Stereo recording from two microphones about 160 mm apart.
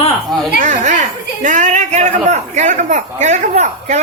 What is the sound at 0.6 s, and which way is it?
A man's voice, 50° right (ahead or behind).